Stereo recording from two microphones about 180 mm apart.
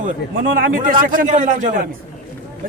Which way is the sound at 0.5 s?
50° right (ahead or behind).